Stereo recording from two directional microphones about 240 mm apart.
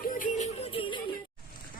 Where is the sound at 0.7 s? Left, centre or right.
Left.